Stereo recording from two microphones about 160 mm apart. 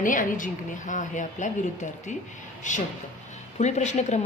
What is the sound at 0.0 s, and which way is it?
Speech, 55° left (ahead or behind).